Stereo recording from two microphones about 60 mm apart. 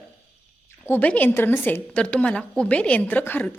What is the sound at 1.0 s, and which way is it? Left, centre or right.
Speech, left.